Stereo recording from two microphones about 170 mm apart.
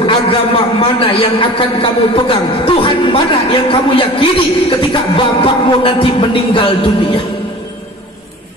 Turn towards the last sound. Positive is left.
turn(degrees=30)  # may be behind; listen again after turning